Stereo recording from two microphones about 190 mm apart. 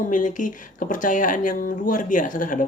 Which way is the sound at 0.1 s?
45° left (ahead or behind).